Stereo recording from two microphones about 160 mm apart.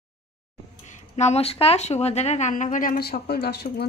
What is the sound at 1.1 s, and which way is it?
Speech, 45° left (ahead or behind).